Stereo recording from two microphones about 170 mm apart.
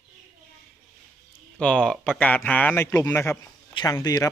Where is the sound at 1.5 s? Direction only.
5° left (ahead or behind).